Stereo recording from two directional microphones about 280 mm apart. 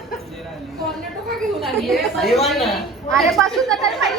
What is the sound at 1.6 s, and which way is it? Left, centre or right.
A woman's voice, centre.